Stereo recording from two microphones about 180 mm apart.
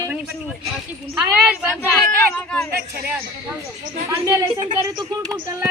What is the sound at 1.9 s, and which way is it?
Speech, 5° left (ahead or behind).